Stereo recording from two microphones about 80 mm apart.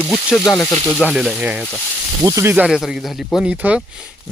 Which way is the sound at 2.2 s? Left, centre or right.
Right.